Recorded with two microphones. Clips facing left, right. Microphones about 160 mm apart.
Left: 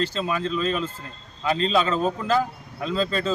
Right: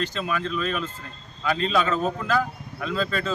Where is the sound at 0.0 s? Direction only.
30° left (ahead or behind).